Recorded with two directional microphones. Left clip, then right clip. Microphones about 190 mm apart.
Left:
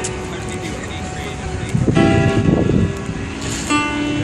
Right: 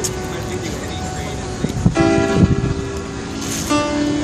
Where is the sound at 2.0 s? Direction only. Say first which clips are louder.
Right 1 dB; 10° right (ahead or behind).